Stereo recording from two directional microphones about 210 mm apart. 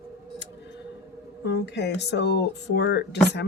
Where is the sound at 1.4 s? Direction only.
55° left (ahead or behind).